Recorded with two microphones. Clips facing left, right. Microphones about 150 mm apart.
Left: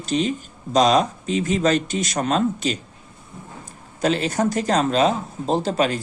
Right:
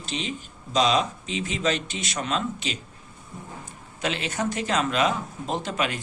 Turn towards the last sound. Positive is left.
turn(degrees=35)  # may be behind; listen again after turning